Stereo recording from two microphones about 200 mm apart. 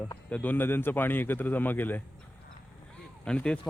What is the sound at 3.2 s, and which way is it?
Speech, 5° left (ahead or behind).